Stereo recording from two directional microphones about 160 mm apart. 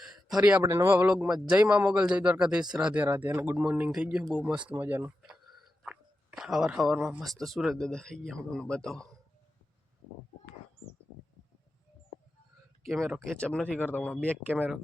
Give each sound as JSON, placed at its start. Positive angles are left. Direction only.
{"t": 0.6, "sound": "a man's voice", "side_deg": -15}
{"t": 5.2, "sound": "speech", "side_deg": -5}
{"t": 12.9, "sound": "speech", "side_deg": 0}
{"t": 14.5, "sound": "a man's voice", "side_deg": -10}